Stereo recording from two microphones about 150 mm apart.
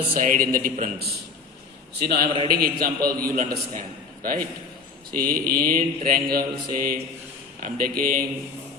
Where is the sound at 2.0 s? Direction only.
90° right.